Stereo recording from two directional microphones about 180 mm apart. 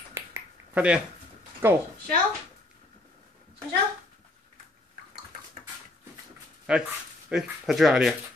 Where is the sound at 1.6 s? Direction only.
10° right (ahead or behind).